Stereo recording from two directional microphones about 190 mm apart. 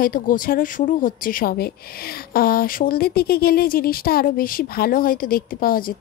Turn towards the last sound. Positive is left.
turn(degrees=50)  # may be behind; listen again after turning